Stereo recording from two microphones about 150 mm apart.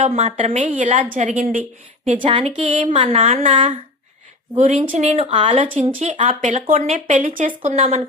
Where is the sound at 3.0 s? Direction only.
40° right (ahead or behind).